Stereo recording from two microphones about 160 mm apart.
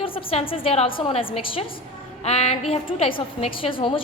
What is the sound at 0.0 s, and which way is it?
A woman's voice, 35° left (ahead or behind).